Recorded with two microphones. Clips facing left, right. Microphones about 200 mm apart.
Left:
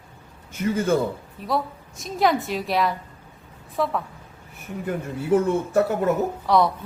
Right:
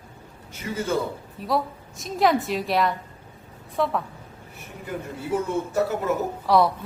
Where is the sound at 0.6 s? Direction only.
55° left (ahead or behind).